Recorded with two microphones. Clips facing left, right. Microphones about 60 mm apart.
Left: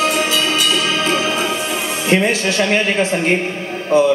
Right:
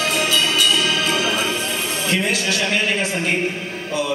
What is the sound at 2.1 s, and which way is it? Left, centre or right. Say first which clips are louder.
A man's voice: left 6 dB; left.